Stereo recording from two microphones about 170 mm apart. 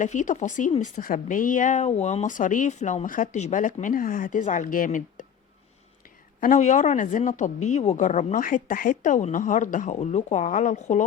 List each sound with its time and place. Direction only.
0.0 s speech: 45° left (ahead or behind)
6.4 s speech: 50° left (ahead or behind)